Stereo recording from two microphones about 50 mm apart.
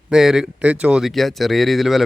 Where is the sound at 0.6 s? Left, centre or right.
Right.